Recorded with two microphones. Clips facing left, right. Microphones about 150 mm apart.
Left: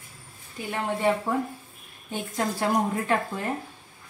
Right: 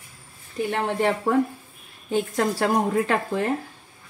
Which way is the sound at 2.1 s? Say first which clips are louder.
Right 6 dB; 90° right.